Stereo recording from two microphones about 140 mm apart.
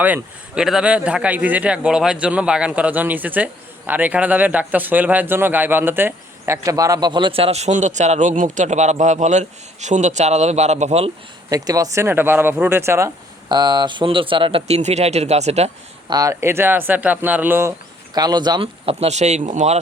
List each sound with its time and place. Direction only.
0.0 s a man's voice: 10° right (ahead or behind); by 11.1 s 50° right (ahead or behind)
11.4 s a man's voice: 25° right (ahead or behind)
13.5 s speech: 30° right (ahead or behind)
14.8 s speech: 50° right (ahead or behind)
16.0 s a man's voice: 25° right (ahead or behind)
18.1 s speech: 30° right (ahead or behind)
18.9 s speech: 50° right (ahead or behind)